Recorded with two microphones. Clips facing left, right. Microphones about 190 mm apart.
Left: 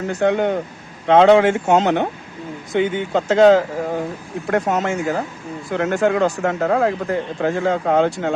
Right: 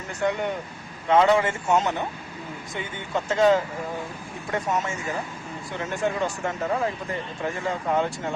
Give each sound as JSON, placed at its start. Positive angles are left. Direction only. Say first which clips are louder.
{"t": 0.1, "sound": "speech", "louder": "left 8 dB", "side_deg": 85}
{"t": 4.4, "sound": "speech", "louder": "left 8 dB", "side_deg": 80}